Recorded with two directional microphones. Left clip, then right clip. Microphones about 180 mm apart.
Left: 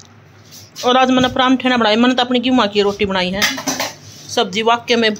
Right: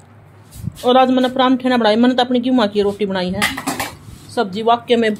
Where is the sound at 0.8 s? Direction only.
10° right (ahead or behind).